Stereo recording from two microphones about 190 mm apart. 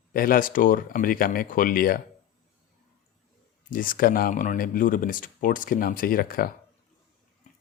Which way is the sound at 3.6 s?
45° left (ahead or behind).